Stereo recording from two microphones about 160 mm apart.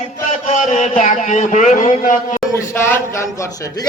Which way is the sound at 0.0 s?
50° left (ahead or behind).